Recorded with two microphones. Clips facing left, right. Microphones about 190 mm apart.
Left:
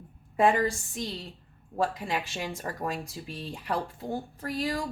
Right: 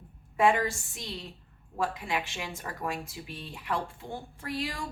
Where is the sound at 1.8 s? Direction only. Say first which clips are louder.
Left 2 dB; 35° left (ahead or behind).